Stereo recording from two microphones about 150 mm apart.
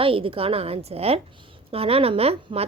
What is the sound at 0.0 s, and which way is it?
A woman's voice, 35° right (ahead or behind).